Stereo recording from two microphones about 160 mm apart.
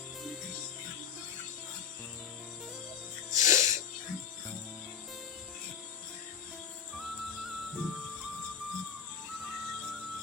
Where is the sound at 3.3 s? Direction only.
20° right (ahead or behind).